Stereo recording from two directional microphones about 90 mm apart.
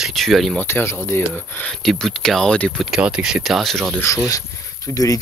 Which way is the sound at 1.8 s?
Centre (ahead or behind).